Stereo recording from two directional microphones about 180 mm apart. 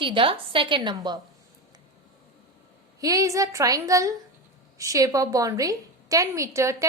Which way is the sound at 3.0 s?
20° right (ahead or behind).